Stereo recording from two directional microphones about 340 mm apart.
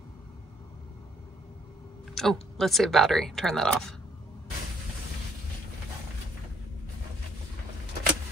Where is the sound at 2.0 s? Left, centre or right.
Centre.